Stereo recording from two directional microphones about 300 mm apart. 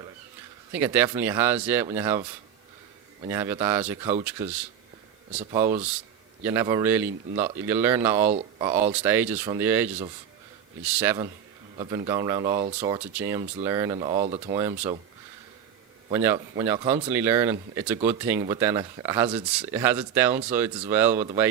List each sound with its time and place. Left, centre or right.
0.7 s speech: centre
3.2 s speech: centre
5.5 s speech: centre
8.3 s speech: centre
8.7 s speech: centre
14.5 s speech: centre
16.1 s speech: centre